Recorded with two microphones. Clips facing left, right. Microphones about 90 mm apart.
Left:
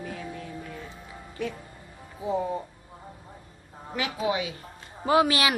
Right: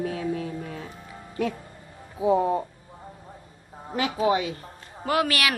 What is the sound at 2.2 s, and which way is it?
Speech, 70° right (ahead or behind).